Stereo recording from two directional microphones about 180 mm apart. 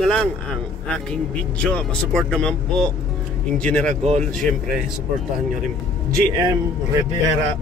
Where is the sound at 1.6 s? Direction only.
5° left (ahead or behind).